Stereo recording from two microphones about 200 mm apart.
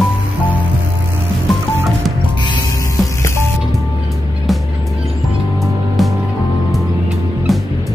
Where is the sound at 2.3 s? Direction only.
20° left (ahead or behind).